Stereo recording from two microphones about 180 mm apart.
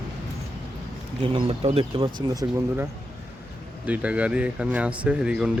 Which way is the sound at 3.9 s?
5° right (ahead or behind).